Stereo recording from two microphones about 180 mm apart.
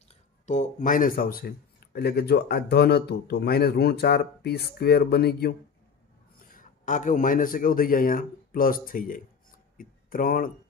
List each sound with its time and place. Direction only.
0.1 s speech: 40° left (ahead or behind); by 5.6 s 60° left (ahead or behind)
6.4 s speech: 50° left (ahead or behind)